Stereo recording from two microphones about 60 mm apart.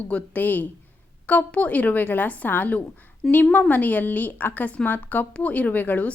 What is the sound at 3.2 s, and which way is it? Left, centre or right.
Speech, centre.